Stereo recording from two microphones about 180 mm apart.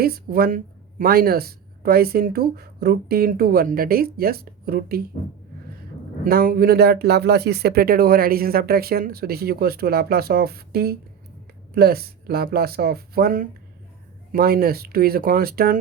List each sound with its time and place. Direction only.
0.0 s speech: 55° right (ahead or behind)
6.2 s speech: 55° right (ahead or behind)